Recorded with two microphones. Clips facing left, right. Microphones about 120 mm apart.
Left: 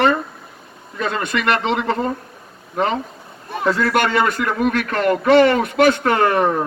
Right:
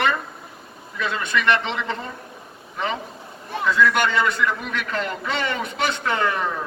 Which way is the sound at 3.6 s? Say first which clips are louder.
Left 2 dB; 45° left (ahead or behind).